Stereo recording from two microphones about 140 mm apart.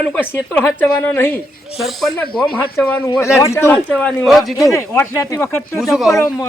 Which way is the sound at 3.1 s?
20° left (ahead or behind).